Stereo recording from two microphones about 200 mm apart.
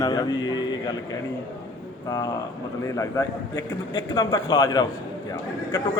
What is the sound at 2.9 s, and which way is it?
A man's voice, 15° left (ahead or behind).